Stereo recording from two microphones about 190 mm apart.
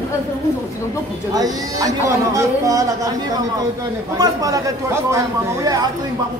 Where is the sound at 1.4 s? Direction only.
20° right (ahead or behind).